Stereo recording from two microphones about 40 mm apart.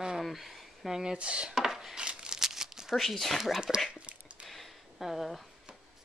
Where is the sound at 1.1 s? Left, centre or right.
Right.